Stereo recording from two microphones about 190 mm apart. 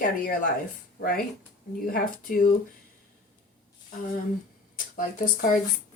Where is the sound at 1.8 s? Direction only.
50° left (ahead or behind).